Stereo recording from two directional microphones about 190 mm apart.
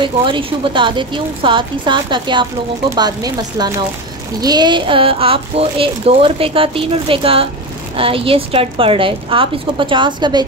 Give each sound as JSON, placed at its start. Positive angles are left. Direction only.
{"t": 0.0, "sound": "speech", "side_deg": -25}